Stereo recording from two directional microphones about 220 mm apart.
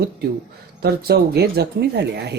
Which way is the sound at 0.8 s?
45° right (ahead or behind).